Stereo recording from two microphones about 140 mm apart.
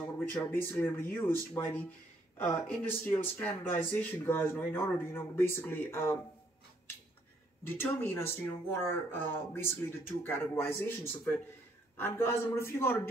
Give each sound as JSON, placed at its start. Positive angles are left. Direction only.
{"t": 0.2, "sound": "speech", "side_deg": 15}
{"t": 7.6, "sound": "speech", "side_deg": 15}